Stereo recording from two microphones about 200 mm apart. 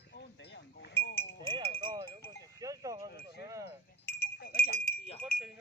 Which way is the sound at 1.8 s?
25° right (ahead or behind).